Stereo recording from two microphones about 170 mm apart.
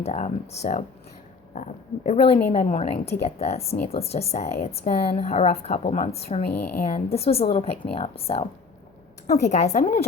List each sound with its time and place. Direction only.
0.0 s a woman's voice: 40° left (ahead or behind)
6.5 s a woman's voice: 10° left (ahead or behind)
6.7 s a woman's voice: 45° left (ahead or behind)